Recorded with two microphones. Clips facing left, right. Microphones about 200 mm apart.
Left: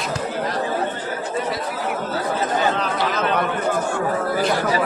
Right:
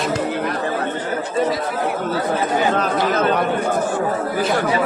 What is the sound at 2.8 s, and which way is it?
Speech, 45° right (ahead or behind).